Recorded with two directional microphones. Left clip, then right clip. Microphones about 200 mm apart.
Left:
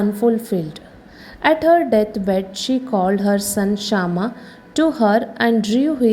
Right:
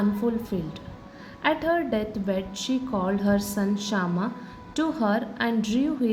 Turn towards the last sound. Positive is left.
turn(degrees=35)  # may be behind; listen again after turning